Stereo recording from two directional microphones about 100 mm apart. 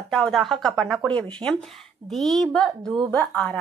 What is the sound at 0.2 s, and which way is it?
Speech, centre (ahead or behind).